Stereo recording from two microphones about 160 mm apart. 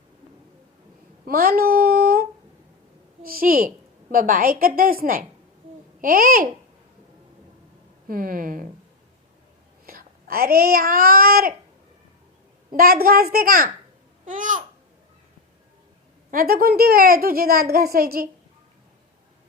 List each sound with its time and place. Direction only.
1.2 s a sound: 70° right (ahead or behind)
3.2 s a woman's voice: 65° right (ahead or behind)
8.0 s a woman's voice: 60° right (ahead or behind)
9.8 s speech: 70° right (ahead or behind)
12.7 s a child's voice: 65° right (ahead or behind)
14.3 s babbling: 55° right (ahead or behind)
16.3 s a child's voice: 65° right (ahead or behind)